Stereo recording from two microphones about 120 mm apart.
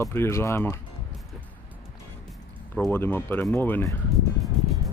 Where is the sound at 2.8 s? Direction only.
20° left (ahead or behind).